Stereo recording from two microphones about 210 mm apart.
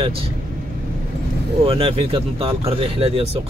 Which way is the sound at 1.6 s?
30° right (ahead or behind).